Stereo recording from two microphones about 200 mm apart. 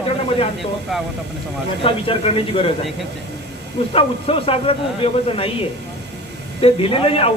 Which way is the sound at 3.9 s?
30° left (ahead or behind).